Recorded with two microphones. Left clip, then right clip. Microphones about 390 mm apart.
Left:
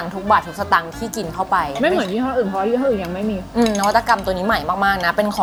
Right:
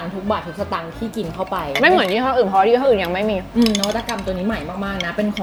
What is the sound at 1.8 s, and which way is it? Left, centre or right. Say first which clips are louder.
Speech: right 4 dB; right.